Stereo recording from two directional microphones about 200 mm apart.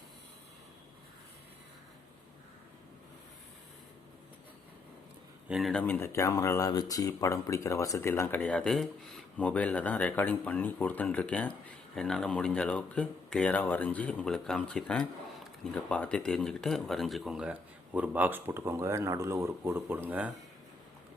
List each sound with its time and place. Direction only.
5.5 s speech: centre (ahead or behind)